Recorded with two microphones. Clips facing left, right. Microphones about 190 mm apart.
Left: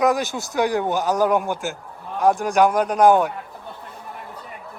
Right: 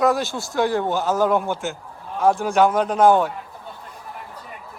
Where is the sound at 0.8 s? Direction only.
15° left (ahead or behind).